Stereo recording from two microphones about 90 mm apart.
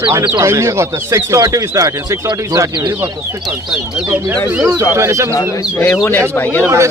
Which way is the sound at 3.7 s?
5° right (ahead or behind).